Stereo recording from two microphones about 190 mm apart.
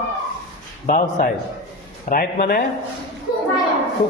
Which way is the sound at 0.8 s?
45° left (ahead or behind).